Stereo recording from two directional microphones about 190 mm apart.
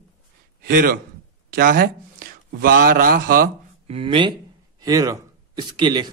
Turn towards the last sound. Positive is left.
turn(degrees=-25)  # may be behind; listen again after turning